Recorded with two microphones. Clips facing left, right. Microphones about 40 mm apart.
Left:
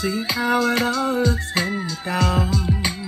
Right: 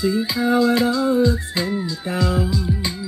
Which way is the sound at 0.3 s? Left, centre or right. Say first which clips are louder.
Right 1 dB; left.